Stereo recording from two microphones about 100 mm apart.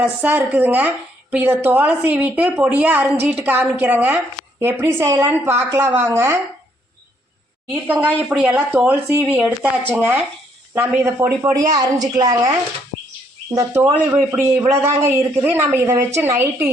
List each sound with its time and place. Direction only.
0.0 s a woman's voice: 20° right (ahead or behind)
7.9 s a woman's voice: 20° right (ahead or behind); by 12.5 s 35° right (ahead or behind)
13.7 s a woman's voice: 25° right (ahead or behind)